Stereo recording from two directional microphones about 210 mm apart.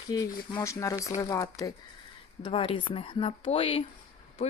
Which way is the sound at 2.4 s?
25° left (ahead or behind).